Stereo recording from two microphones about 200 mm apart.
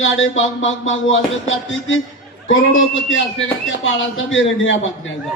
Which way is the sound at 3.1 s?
75° left (ahead or behind).